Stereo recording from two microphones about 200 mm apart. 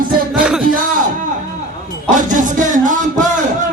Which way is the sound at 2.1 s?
40° right (ahead or behind).